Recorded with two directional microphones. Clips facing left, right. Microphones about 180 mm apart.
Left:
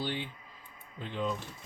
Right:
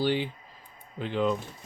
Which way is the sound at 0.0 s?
75° right (ahead or behind).